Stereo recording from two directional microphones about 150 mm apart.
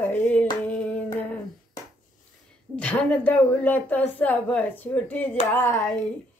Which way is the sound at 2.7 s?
10° left (ahead or behind).